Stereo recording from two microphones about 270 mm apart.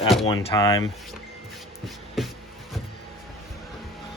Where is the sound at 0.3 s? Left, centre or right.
Centre.